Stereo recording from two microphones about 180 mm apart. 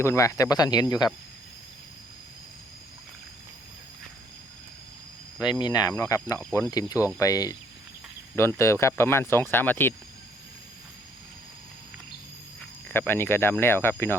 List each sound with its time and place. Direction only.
0.0 s speech: 15° left (ahead or behind)
5.5 s speech: 25° left (ahead or behind)
12.9 s speech: 10° left (ahead or behind)